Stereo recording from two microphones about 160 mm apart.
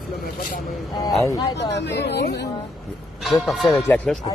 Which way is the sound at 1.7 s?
90° left.